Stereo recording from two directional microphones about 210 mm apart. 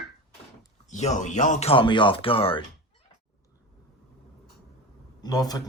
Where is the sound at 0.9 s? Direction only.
35° left (ahead or behind).